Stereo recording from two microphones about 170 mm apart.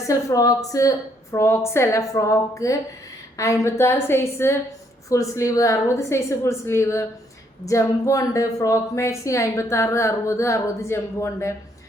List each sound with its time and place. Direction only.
0.0 s a woman's voice: 20° left (ahead or behind)